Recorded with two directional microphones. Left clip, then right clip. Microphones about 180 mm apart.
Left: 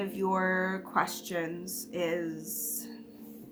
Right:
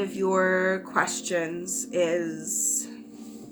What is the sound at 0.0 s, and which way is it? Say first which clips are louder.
Speech: right 6 dB; 40° left (ahead or behind).